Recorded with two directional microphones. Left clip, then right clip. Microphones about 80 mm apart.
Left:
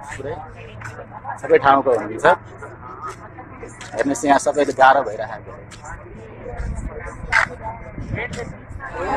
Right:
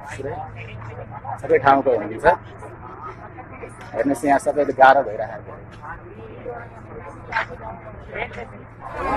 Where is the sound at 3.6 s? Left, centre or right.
Centre.